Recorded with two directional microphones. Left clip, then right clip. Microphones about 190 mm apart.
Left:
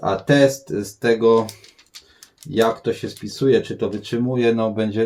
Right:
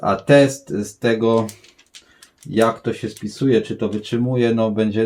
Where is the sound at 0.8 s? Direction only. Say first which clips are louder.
Left 1 dB; 35° right (ahead or behind).